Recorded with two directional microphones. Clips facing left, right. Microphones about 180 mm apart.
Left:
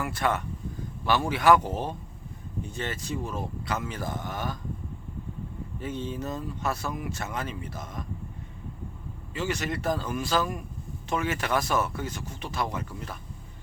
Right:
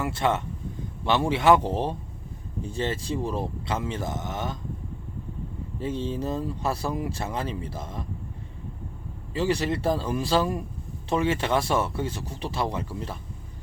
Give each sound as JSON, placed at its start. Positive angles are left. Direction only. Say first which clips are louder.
{"t": 0.0, "sound": "speech", "louder": "right 3 dB", "side_deg": -25}
{"t": 5.8, "sound": "speech", "louder": "right 4 dB", "side_deg": -30}
{"t": 9.3, "sound": "speech", "louder": "right 5 dB", "side_deg": -35}